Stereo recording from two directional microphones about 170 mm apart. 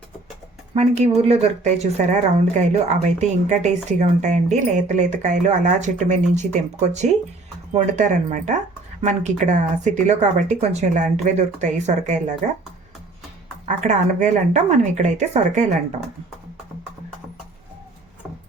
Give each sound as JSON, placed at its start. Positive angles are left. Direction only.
{"t": 0.7, "sound": "speech", "side_deg": -40}
{"t": 13.7, "sound": "speech", "side_deg": -45}